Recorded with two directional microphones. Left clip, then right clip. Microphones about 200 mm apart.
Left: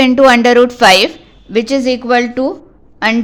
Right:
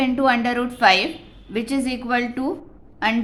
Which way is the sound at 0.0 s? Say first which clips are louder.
Left 12 dB; 40° left (ahead or behind).